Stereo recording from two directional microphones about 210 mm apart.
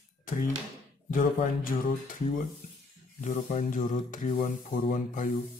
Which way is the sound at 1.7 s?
40° left (ahead or behind).